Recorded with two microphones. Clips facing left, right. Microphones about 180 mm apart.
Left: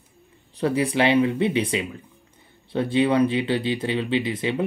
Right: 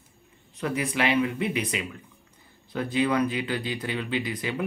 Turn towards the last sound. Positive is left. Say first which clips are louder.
# left 5 dB
turn(degrees=25)  # may be behind; listen again after turning